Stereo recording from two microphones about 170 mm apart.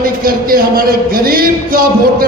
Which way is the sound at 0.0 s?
60° right (ahead or behind).